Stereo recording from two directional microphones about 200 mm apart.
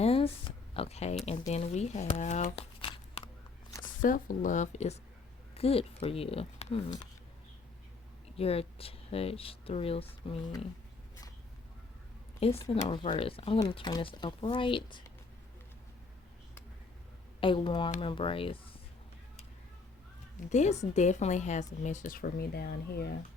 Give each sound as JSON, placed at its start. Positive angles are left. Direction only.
{"t": 0.0, "sound": "a sound", "side_deg": 30}
{"t": 1.2, "sound": "speech", "side_deg": 30}
{"t": 3.8, "sound": "a woman's voice", "side_deg": 40}
{"t": 8.4, "sound": "speech", "side_deg": 30}
{"t": 12.4, "sound": "speech", "side_deg": 30}
{"t": 17.4, "sound": "speech", "side_deg": 25}
{"t": 20.5, "sound": "a woman's voice", "side_deg": 35}